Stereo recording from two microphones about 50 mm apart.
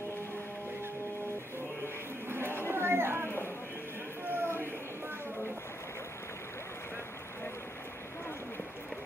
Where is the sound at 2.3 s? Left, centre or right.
Right.